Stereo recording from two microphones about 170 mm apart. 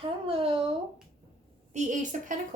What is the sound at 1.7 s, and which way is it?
Speech, 45° right (ahead or behind).